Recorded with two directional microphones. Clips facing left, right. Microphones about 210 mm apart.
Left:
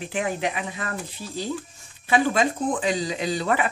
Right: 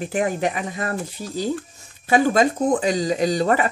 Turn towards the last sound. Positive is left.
turn(degrees=-40)  # may be behind; listen again after turning